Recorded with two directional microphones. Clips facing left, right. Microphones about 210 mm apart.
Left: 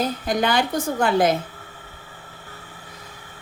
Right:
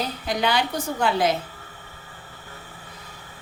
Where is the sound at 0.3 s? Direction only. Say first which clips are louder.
Left 1 dB; 50° left (ahead or behind).